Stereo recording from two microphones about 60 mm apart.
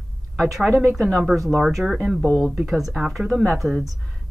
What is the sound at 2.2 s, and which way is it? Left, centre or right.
Speech, centre.